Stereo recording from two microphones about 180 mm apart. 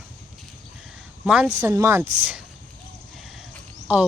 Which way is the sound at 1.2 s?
5° right (ahead or behind).